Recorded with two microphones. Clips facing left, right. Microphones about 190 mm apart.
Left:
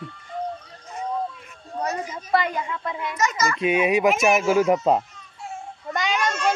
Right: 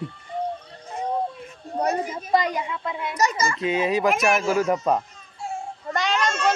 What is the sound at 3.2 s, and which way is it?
Speech, 30° right (ahead or behind).